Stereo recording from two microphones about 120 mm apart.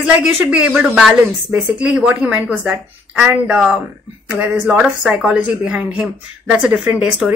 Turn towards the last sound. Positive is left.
turn(degrees=-10)  # may be behind; listen again after turning